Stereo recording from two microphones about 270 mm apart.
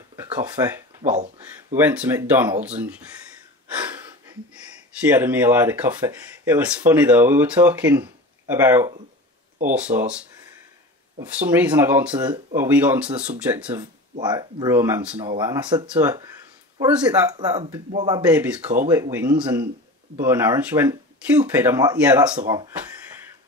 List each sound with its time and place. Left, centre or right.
0.1 s a sound: centre
1.1 s speech: right
1.8 s speech: centre
5.0 s speech: centre
11.1 s speech: centre